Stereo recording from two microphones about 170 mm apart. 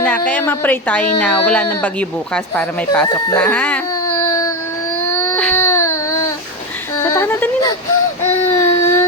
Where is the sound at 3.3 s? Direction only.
10° left (ahead or behind).